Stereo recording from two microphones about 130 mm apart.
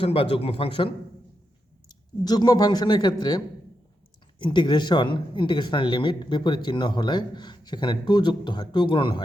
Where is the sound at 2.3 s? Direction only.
30° left (ahead or behind).